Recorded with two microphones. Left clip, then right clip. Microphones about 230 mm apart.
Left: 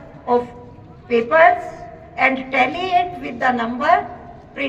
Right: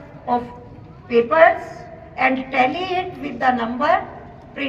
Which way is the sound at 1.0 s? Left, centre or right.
Left.